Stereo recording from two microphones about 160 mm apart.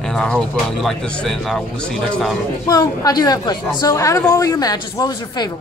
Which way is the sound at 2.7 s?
20° left (ahead or behind).